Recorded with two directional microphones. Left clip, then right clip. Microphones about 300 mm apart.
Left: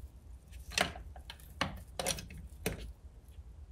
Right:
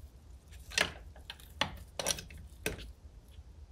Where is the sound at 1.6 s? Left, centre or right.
Centre.